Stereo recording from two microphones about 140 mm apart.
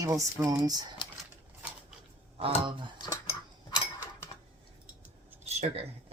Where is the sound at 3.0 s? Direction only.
25° left (ahead or behind).